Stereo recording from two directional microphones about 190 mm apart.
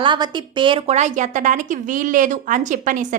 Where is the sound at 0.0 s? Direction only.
25° right (ahead or behind).